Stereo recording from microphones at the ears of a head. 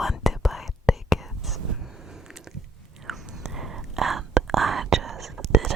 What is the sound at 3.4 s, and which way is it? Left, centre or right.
Whispering, right.